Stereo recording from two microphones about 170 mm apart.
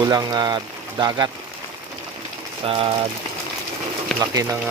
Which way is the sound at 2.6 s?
35° right (ahead or behind).